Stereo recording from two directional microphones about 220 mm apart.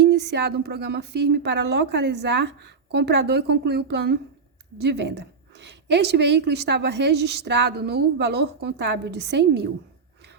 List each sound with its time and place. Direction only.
0.0 s a woman's voice: 50° right (ahead or behind)